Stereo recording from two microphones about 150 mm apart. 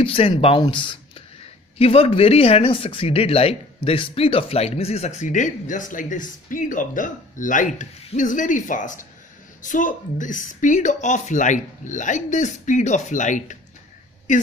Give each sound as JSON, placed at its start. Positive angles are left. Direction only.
{"t": 0.0, "sound": "speech", "side_deg": 35}